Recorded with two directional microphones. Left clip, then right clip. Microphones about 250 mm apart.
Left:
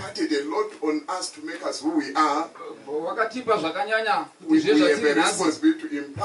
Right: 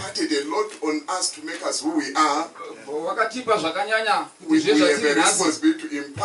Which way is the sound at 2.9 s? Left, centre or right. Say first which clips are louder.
Right 1 dB; left.